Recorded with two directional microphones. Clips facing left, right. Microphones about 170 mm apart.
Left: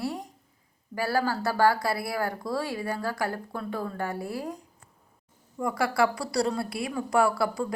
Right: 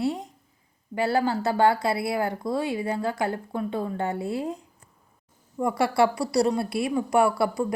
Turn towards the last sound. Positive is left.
turn(degrees=-20)  # may be behind; listen again after turning